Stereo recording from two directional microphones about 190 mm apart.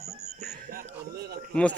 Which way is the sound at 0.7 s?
55° right (ahead or behind).